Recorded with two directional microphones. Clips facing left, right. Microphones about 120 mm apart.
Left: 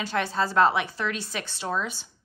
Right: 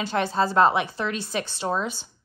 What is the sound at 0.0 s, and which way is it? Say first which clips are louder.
A woman's voice: right 3 dB; 25° right (ahead or behind).